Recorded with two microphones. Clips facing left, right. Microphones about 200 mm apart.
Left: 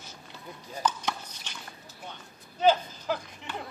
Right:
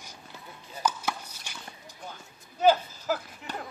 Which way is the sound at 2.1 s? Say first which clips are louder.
Even; 5° right (ahead or behind).